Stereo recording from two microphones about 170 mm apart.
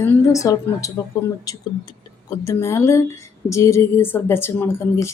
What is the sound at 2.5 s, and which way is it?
Speech, 15° left (ahead or behind).